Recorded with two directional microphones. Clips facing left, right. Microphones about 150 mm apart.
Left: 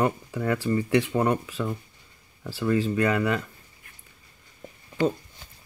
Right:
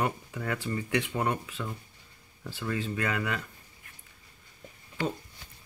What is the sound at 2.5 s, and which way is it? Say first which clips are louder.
Speech: left 9 dB; 35° left (ahead or behind).